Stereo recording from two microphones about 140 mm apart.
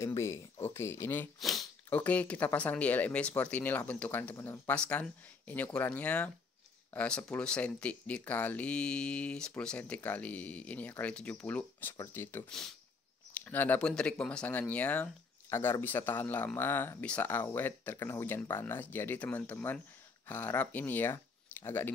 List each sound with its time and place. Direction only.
0.0 s speech: 20° left (ahead or behind)
1.4 s a sound: centre (ahead or behind)
1.9 s speech: 10° left (ahead or behind)
12.4 s speech: 5° left (ahead or behind)
13.3 s speech: 15° left (ahead or behind)